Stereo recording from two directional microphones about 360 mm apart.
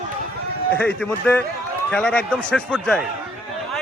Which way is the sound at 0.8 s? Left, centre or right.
Centre.